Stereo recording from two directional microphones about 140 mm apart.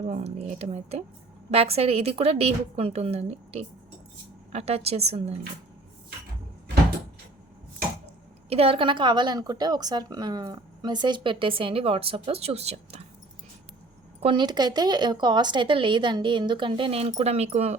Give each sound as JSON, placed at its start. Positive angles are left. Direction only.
{"t": 0.0, "sound": "a woman's voice", "side_deg": -55}
{"t": 8.4, "sound": "a woman's voice", "side_deg": -45}
{"t": 14.2, "sound": "a woman's voice", "side_deg": -40}